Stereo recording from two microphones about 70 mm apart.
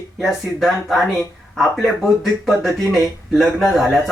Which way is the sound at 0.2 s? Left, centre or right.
Centre.